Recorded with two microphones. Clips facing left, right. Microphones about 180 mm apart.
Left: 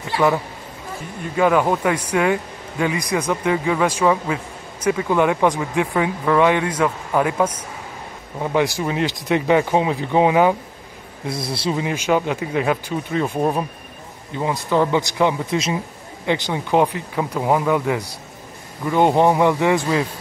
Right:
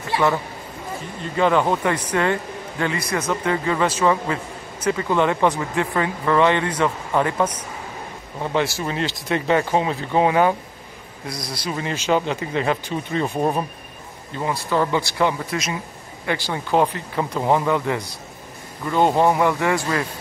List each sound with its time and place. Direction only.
1.3 s speech: 5° left (ahead or behind)
11.2 s a man's voice: 25° left (ahead or behind)
11.7 s speech: 10° left (ahead or behind)
14.3 s speech: 15° left (ahead or behind)